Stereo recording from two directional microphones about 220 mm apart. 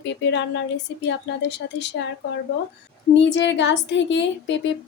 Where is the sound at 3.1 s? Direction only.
55° left (ahead or behind).